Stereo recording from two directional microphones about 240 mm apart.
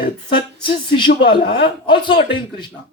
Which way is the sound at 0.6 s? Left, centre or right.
Left.